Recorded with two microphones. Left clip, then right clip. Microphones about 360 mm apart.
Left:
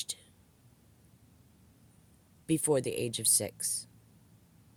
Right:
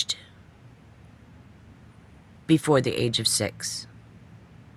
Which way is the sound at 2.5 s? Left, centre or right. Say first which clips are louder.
Right 8 dB; left.